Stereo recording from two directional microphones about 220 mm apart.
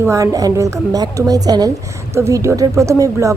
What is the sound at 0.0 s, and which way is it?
Speech, 15° right (ahead or behind).